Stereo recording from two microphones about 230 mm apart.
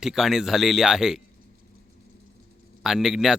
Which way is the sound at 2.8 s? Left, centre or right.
Centre.